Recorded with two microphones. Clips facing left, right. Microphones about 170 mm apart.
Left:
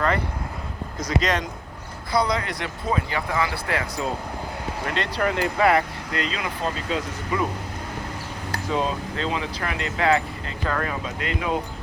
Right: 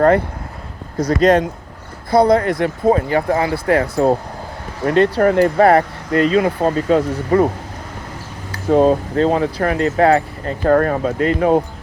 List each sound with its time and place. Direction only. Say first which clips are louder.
0.9 s speech: right 11 dB; 60° right (ahead or behind)
8.7 s speech: right 13 dB; 55° right (ahead or behind)
11.2 s speech: right 12 dB; 40° right (ahead or behind)